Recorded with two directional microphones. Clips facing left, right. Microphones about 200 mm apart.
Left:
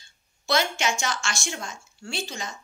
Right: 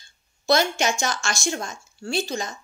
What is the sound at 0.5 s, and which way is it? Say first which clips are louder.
Speech: right 4 dB; 40° right (ahead or behind).